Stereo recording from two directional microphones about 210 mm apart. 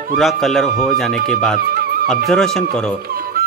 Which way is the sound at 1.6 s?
45° right (ahead or behind).